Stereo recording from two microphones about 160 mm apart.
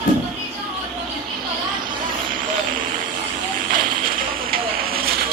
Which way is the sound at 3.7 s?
60° right (ahead or behind).